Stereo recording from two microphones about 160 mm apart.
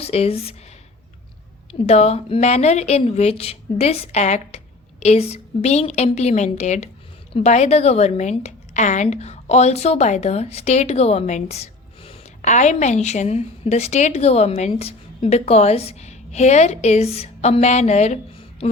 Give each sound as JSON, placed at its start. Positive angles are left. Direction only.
{"t": 0.0, "sound": "a woman's voice", "side_deg": 40}
{"t": 1.9, "sound": "a woman's voice", "side_deg": 40}